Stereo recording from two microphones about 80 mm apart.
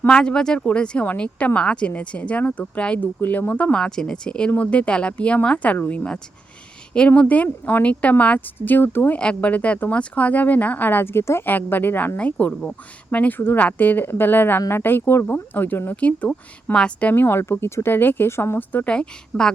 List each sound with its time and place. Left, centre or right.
0.1 s speech: centre
3.8 s speech: centre; by 9.1 s left
9.1 s speech: centre
17.1 s speech: left
18.9 s speech: centre